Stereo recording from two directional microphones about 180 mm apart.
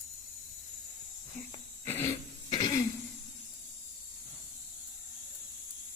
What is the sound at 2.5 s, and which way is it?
Throat clearing, 20° left (ahead or behind).